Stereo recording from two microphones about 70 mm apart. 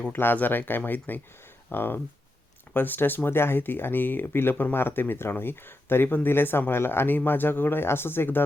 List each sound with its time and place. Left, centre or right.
0.0 s speech: left